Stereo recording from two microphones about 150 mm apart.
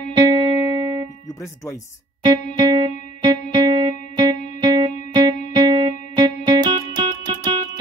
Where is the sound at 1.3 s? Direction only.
20° left (ahead or behind).